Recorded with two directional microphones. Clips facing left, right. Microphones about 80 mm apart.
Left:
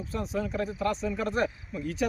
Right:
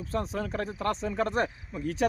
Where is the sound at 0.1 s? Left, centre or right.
Right.